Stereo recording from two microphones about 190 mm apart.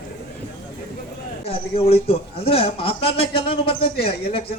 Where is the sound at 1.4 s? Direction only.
30° left (ahead or behind).